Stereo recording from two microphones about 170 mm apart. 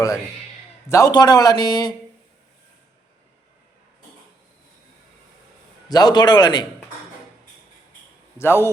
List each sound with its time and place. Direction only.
0.9 s speech: 20° left (ahead or behind)
5.9 s speech: 25° left (ahead or behind)
8.4 s a man's voice: 15° left (ahead or behind)